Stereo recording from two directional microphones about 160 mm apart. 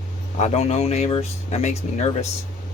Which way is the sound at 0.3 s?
45° left (ahead or behind).